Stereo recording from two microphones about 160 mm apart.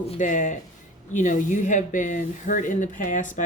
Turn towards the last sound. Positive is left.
turn(degrees=55)  # may be behind; listen again after turning